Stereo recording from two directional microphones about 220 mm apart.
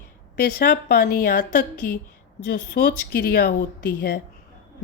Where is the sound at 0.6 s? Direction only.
45° left (ahead or behind).